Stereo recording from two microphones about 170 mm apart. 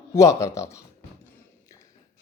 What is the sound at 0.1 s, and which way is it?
Speech, 20° left (ahead or behind).